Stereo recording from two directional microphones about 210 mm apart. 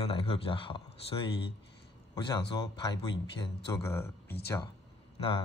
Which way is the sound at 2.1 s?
20° left (ahead or behind).